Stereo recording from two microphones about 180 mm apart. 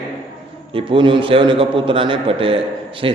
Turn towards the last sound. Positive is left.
turn(degrees=-30)  # may be behind; listen again after turning